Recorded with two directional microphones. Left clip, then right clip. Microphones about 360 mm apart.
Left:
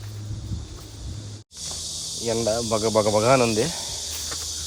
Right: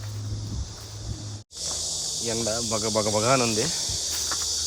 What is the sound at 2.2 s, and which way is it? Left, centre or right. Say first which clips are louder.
Speech: left 6 dB; centre.